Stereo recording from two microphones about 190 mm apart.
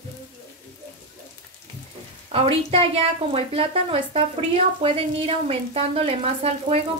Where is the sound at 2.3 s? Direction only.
30° right (ahead or behind).